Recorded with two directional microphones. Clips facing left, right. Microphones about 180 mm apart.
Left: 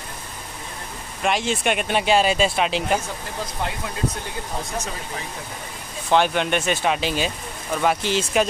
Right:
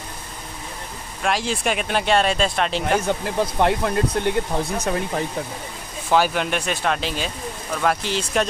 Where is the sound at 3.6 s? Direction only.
65° right (ahead or behind).